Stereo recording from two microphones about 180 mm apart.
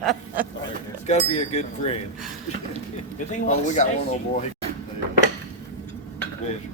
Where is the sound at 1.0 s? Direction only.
40° left (ahead or behind).